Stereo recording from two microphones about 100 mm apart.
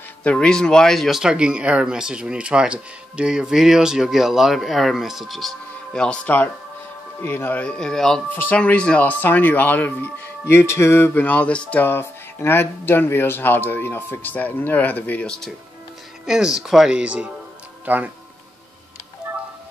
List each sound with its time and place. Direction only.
0.2 s speech: 10° left (ahead or behind)
7.6 s speech: 10° left (ahead or behind)
8.3 s speech: 15° left (ahead or behind)
16.3 s speech: 5° right (ahead or behind)